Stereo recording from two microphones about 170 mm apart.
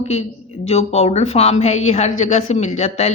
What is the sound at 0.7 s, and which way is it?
A woman's voice, 40° left (ahead or behind).